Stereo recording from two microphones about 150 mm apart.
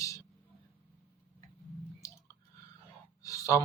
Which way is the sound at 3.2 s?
20° left (ahead or behind).